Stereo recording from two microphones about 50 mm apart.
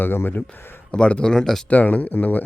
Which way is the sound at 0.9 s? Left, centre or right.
Centre.